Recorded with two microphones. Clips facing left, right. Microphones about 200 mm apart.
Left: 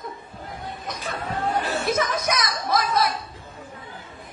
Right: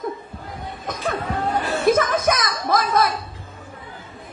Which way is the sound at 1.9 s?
50° right (ahead or behind).